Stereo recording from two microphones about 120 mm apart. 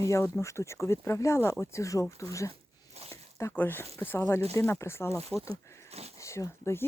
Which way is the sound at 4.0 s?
20° left (ahead or behind).